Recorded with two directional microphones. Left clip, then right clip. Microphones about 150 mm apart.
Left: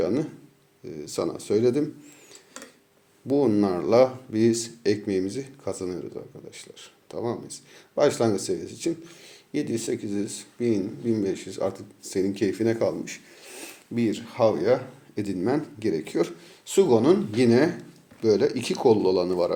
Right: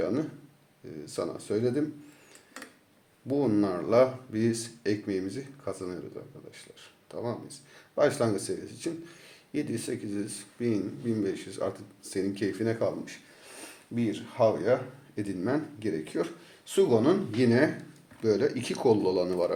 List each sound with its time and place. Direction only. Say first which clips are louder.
0.0 s a sound: left 4 dB; 35° left (ahead or behind)
0.9 s speech: left 5 dB; 35° left (ahead or behind)
3.2 s speech: left 5 dB; 40° left (ahead or behind)